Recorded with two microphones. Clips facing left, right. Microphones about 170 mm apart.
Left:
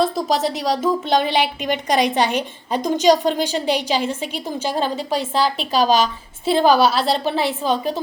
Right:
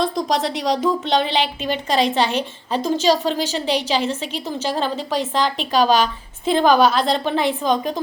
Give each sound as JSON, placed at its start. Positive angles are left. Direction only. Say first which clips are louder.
{"t": 0.0, "sound": "a woman's voice", "louder": "left 1 dB", "side_deg": 5}
{"t": 5.5, "sound": "a woman's voice", "louder": "right 1 dB", "side_deg": 40}
{"t": 6.4, "sound": "a woman's voice", "louder": "even", "side_deg": 5}